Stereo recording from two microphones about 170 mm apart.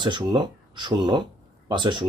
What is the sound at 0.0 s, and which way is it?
Speech, 25° right (ahead or behind).